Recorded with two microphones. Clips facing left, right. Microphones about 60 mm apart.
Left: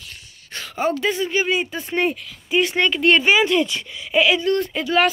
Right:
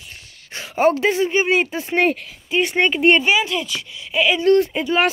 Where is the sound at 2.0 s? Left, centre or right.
Right.